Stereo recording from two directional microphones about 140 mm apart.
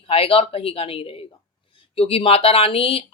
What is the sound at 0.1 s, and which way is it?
A woman's voice, 40° left (ahead or behind).